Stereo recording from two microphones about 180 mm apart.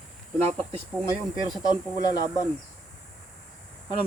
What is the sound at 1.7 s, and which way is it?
Speech, 20° left (ahead or behind).